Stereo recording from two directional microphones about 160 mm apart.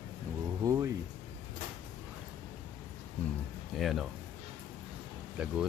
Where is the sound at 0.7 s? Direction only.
20° right (ahead or behind).